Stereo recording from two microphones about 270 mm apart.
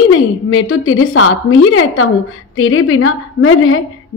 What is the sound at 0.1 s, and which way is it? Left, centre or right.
A woman's voice, left.